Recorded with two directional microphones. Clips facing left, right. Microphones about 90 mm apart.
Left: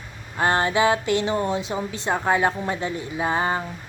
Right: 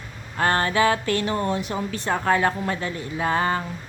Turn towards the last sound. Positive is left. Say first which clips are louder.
# even
turn(degrees=15)  # may be behind; listen again after turning